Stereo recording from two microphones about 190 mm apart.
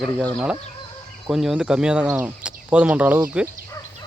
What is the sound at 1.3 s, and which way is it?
Speech, centre (ahead or behind).